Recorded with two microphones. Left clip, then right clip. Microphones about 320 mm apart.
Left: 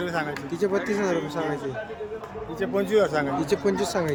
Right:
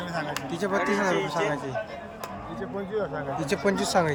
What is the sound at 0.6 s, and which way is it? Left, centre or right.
Speech, centre.